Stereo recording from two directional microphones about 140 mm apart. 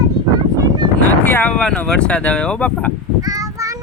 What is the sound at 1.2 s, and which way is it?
Speech, 10° left (ahead or behind).